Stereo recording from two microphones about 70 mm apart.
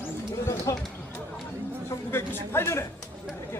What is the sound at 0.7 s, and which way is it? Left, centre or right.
Speech, left.